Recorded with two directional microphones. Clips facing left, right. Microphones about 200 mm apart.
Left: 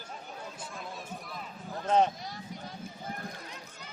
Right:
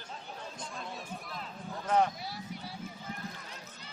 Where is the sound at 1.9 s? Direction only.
20° left (ahead or behind).